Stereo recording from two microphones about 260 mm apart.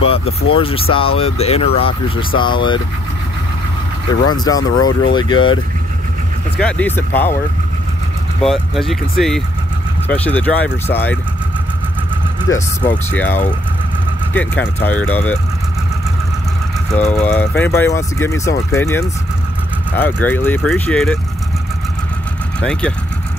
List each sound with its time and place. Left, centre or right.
0.0 s speech: left
4.1 s speech: centre
6.6 s speech: centre
8.4 s speech: centre
12.4 s speech: centre
17.1 s speech: centre
22.6 s speech: centre